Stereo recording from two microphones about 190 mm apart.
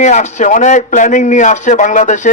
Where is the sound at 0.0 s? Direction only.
40° left (ahead or behind).